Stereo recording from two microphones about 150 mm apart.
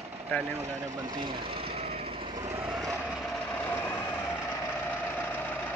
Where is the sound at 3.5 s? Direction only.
15° left (ahead or behind).